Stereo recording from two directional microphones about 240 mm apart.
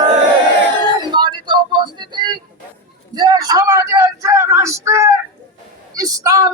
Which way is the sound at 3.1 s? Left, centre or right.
Centre.